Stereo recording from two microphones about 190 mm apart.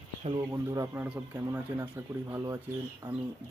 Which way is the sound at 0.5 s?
15° right (ahead or behind).